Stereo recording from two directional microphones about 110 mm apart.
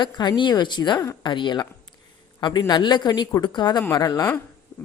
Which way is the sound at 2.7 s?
45° left (ahead or behind).